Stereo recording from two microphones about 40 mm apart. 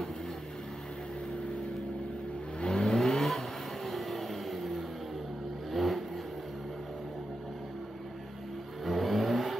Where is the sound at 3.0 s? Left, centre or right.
Centre.